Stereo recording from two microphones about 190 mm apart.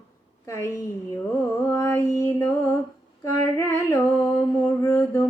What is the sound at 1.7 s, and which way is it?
Female singing, 15° left (ahead or behind).